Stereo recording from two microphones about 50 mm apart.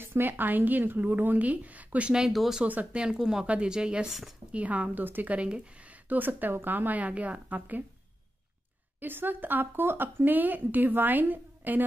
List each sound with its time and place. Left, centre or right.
0.0 s speech: right
2.3 s speech: centre
2.6 s speech: right
2.9 s speech: centre
3.4 s speech: centre
4.5 s speech: right
9.0 s speech: right